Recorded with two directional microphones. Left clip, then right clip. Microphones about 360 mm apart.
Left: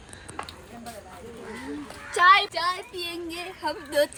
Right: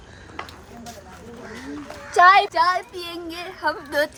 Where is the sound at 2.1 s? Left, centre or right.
Right.